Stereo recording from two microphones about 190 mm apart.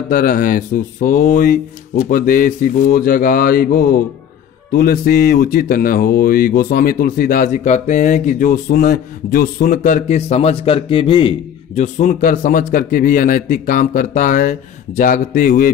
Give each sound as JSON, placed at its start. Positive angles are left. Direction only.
{"t": 0.1, "sound": "speech", "side_deg": 45}